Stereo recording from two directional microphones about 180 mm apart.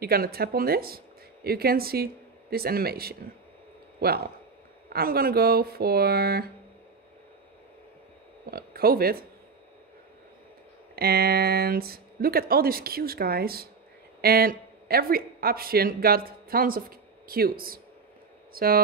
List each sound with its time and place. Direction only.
0.0 s speech: 55° right (ahead or behind)
8.5 s speech: 55° right (ahead or behind)
11.0 s speech: 60° right (ahead or behind)